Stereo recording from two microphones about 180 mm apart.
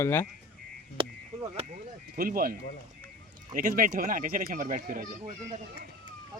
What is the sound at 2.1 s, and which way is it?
Speech, 55° right (ahead or behind).